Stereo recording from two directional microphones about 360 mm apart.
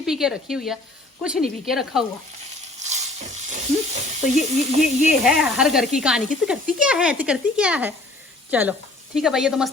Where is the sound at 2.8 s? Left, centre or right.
Centre.